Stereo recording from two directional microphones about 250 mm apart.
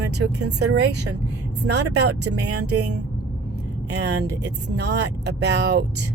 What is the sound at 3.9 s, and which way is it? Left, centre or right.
Speech, right.